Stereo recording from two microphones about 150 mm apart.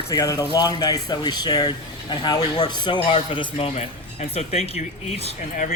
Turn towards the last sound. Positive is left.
turn(degrees=55)  # may be behind; listen again after turning